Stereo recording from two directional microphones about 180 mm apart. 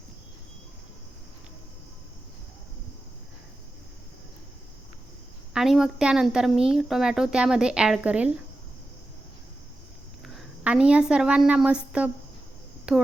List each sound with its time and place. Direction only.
5.5 s speech: centre (ahead or behind)
10.2 s a woman's voice: 5° right (ahead or behind)